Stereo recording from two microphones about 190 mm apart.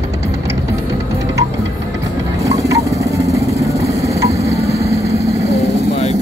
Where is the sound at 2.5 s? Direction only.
15° right (ahead or behind).